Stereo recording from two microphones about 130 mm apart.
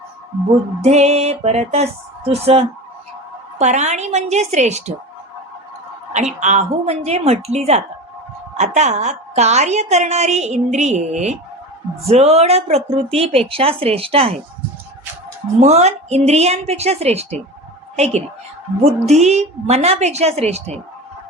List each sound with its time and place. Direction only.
0.8 s a woman's voice: 55° right (ahead or behind)
3.6 s a woman's voice: 60° right (ahead or behind)
6.1 s a woman's voice: 65° right (ahead or behind); by 14.3 s 50° right (ahead or behind)
15.6 s a woman's voice: 60° right (ahead or behind)